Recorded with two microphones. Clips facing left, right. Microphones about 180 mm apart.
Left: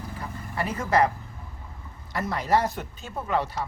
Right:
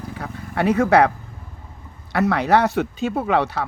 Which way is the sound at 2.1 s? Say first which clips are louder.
Right 7 dB; 70° right (ahead or behind).